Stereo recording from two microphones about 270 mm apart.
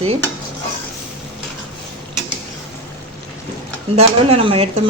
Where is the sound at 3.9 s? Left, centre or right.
Right.